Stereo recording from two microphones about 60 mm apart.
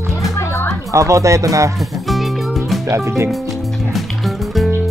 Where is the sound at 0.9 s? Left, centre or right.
Right.